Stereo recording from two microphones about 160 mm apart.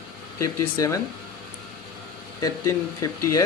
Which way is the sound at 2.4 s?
20° left (ahead or behind).